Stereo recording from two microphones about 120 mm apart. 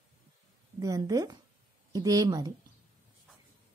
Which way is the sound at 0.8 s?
30° right (ahead or behind).